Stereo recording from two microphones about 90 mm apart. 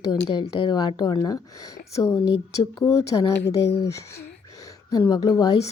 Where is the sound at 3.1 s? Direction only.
55° left (ahead or behind).